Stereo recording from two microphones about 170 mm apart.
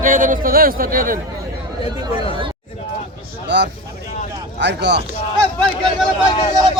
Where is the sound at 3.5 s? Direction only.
90° right.